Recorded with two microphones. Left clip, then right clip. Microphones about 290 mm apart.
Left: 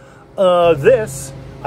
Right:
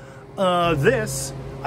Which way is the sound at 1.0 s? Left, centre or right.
Centre.